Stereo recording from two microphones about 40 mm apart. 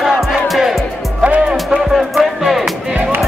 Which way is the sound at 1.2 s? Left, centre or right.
Right.